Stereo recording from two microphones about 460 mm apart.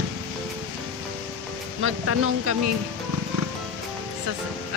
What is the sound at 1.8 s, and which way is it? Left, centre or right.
Speech, right.